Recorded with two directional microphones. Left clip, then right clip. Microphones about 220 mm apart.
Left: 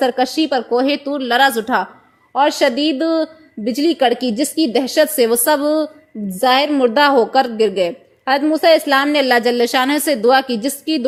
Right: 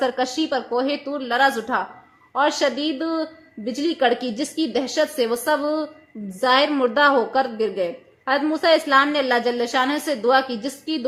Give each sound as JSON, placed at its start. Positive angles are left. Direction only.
{"t": 0.0, "sound": "a woman's voice", "side_deg": 30}